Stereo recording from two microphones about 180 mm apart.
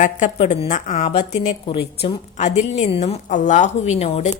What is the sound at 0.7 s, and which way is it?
A woman's voice, 45° left (ahead or behind).